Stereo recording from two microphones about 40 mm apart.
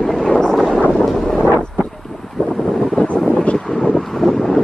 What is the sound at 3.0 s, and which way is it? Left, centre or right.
Vehicle, left.